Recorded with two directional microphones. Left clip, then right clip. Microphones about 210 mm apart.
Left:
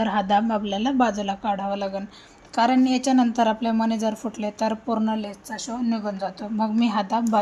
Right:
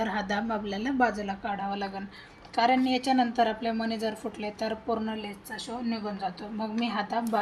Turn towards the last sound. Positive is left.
turn(degrees=55)  # may be behind; listen again after turning